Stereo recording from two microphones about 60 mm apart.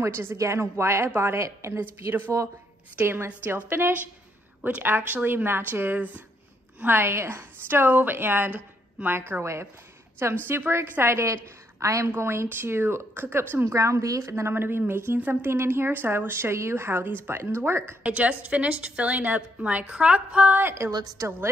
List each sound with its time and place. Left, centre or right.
0.0 s a woman's voice: right
1.8 s a woman's voice: right
3.4 s a woman's voice: right
13.7 s speech: right
14.5 s speech: right
15.1 s a woman's voice: right
15.5 s speech: right
18.0 s a woman's voice: right
21.2 s speech: right